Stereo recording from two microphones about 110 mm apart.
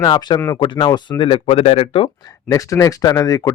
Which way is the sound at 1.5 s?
60° left (ahead or behind).